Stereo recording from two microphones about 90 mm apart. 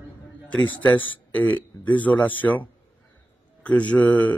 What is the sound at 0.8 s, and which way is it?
A man's voice, 20° left (ahead or behind).